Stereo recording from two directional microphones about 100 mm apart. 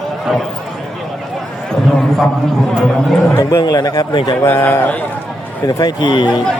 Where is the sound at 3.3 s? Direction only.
30° left (ahead or behind).